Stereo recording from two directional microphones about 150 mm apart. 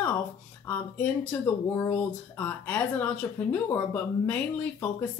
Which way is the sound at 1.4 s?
15° left (ahead or behind).